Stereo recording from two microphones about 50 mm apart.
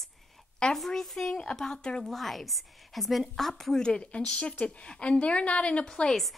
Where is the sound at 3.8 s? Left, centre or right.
Centre.